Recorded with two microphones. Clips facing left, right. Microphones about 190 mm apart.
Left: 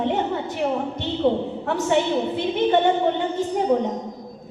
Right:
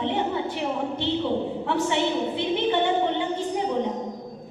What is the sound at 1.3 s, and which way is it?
A woman's voice, 45° left (ahead or behind).